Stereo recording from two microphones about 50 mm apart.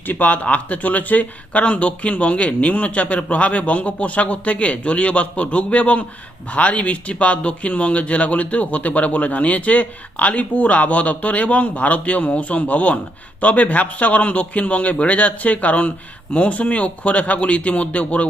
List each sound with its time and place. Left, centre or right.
0.1 s speech: left